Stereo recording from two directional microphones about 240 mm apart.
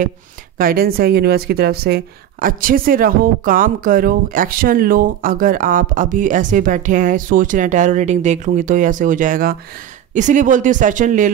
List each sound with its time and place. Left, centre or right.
0.6 s speech: right